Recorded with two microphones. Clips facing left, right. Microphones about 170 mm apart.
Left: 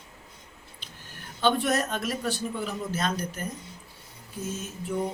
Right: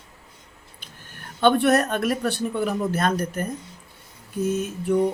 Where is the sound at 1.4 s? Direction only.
60° right (ahead or behind).